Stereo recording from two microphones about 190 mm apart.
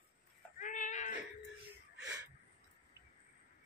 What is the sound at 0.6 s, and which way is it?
Cat, 40° left (ahead or behind).